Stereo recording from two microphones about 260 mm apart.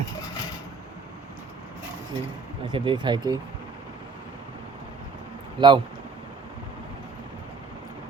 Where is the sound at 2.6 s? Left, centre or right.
Centre.